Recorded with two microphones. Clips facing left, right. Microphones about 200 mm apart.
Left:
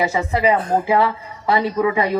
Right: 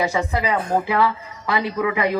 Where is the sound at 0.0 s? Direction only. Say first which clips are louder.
Left 3 dB; 25° left (ahead or behind).